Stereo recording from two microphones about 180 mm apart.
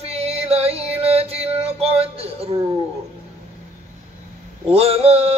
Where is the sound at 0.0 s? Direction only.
35° right (ahead or behind).